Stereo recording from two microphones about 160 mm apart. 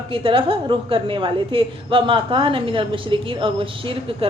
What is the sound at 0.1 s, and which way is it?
A woman's voice, 35° right (ahead or behind).